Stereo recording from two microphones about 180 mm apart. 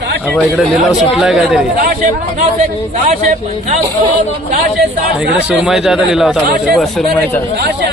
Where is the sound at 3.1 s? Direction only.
40° right (ahead or behind).